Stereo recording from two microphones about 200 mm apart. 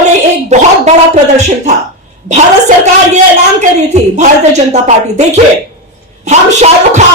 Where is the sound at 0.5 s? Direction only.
35° right (ahead or behind).